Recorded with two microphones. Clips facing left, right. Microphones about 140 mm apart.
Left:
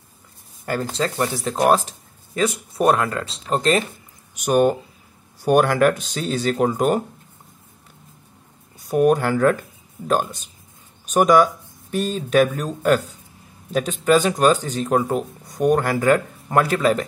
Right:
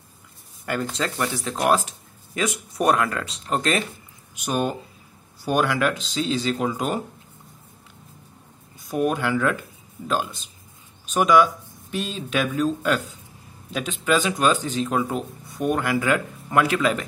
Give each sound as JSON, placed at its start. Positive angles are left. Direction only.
{"t": 0.7, "sound": "speech", "side_deg": 30}
{"t": 5.4, "sound": "speech", "side_deg": 45}
{"t": 8.8, "sound": "speech", "side_deg": 45}